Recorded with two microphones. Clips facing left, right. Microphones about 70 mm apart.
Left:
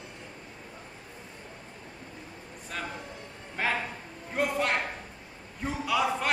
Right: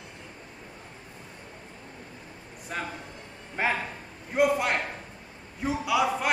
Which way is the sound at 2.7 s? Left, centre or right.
Centre.